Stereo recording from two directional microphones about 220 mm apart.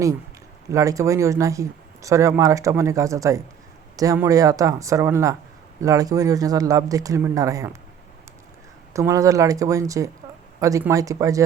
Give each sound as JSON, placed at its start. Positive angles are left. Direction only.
{"t": 0.7, "sound": "speech", "side_deg": -15}
{"t": 8.9, "sound": "speech", "side_deg": -15}